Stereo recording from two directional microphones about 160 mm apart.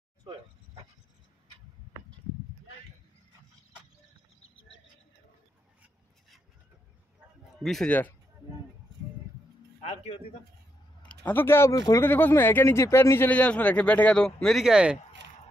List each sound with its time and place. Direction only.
7.5 s speech: centre (ahead or behind)
9.8 s a sound: 40° left (ahead or behind)
11.0 s speech: 10° left (ahead or behind); by 15.0 s 5° right (ahead or behind)